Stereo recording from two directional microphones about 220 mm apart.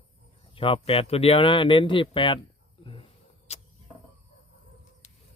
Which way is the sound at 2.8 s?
25° left (ahead or behind).